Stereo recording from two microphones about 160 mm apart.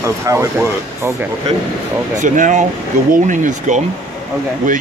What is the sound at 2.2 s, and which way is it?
Speech, 50° right (ahead or behind).